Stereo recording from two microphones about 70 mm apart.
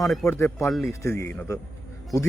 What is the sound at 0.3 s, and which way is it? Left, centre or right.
A man's voice, left.